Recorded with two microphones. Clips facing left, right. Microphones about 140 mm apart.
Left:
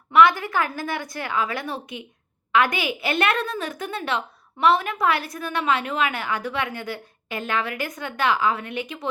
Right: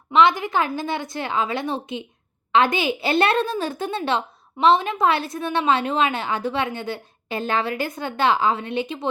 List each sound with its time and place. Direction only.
0.1 s a woman's voice: 20° right (ahead or behind)